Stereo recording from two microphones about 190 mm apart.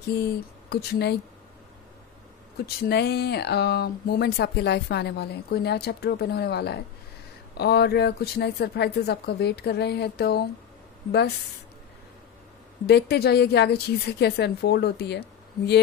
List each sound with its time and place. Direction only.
0.7 s speech: 60° left (ahead or behind)
2.6 s speech: 55° left (ahead or behind)
12.8 s speech: 55° left (ahead or behind)